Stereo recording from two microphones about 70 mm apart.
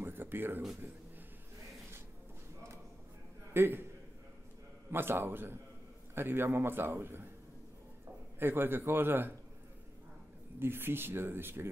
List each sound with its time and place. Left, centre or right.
0.0 s a sound: right
3.5 s a man's voice: right
4.9 s a man's voice: right
8.4 s a man's voice: right
10.6 s a man's voice: right